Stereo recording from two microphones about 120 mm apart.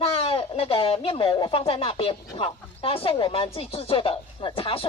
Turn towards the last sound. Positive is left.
turn(degrees=50)  # may be behind; listen again after turning